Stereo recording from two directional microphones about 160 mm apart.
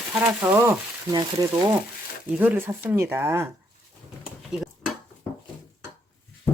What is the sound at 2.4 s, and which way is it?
Speech, 15° right (ahead or behind).